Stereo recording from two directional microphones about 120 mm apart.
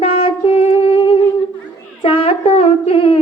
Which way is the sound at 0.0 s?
50° left (ahead or behind).